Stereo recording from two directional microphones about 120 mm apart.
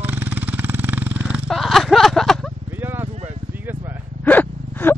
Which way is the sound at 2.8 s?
15° right (ahead or behind).